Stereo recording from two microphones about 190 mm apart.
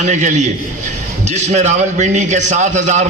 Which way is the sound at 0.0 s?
40° right (ahead or behind).